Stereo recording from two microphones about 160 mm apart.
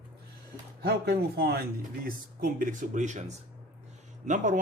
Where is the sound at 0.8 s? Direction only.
80° right.